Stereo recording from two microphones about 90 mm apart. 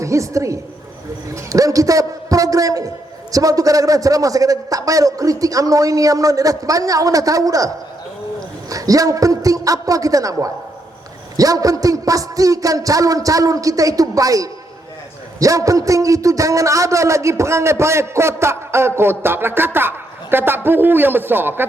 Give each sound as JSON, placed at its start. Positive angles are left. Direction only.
{"t": 0.0, "sound": "a man's voice", "side_deg": -35}
{"t": 8.7, "sound": "a man's voice", "side_deg": -40}